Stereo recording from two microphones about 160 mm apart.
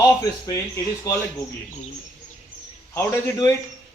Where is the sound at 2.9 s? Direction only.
15° left (ahead or behind).